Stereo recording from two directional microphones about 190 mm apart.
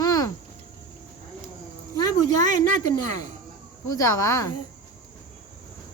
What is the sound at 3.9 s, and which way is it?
Speech, 15° left (ahead or behind).